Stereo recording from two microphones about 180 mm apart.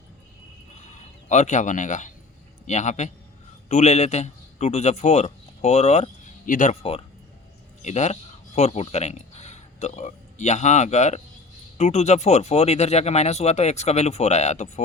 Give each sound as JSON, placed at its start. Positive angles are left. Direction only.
{"t": 0.9, "sound": "a man's voice", "side_deg": 40}